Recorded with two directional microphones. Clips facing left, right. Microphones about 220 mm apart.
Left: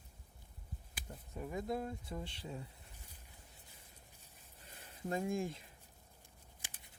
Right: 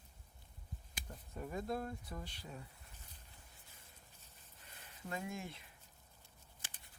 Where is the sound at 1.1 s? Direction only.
15° left (ahead or behind).